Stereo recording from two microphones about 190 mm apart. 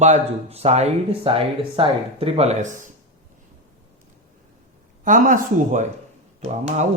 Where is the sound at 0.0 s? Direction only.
35° right (ahead or behind).